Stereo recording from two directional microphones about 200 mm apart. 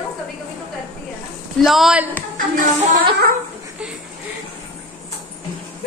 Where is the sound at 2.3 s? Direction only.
45° right (ahead or behind).